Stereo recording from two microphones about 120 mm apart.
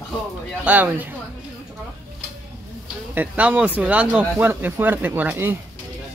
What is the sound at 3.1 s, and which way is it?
Speech, 10° right (ahead or behind).